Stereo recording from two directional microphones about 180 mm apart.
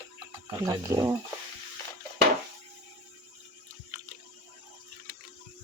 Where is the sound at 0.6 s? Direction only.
20° right (ahead or behind).